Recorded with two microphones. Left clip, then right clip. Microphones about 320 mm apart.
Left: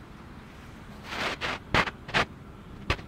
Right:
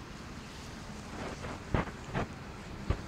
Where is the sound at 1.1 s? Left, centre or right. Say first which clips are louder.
Left 12 dB; left.